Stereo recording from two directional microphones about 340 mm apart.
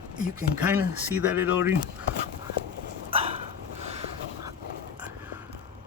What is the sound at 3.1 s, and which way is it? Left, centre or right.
Dog, centre.